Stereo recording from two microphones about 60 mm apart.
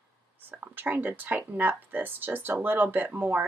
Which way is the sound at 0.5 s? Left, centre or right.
Right.